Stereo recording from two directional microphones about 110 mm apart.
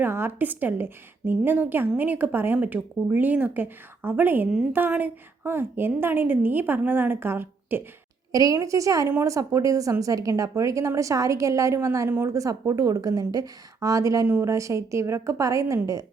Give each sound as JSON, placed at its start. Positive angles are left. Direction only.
{"t": 0.0, "sound": "a woman's voice", "side_deg": -20}
{"t": 8.3, "sound": "a woman's voice", "side_deg": -35}